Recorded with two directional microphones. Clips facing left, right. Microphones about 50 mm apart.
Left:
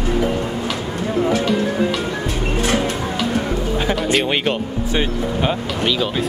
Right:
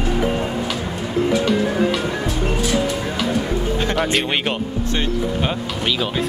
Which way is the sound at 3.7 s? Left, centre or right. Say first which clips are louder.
Left 1 dB; centre.